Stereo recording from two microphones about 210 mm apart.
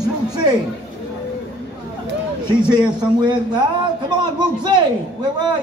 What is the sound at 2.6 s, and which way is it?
A man's voice, 20° right (ahead or behind).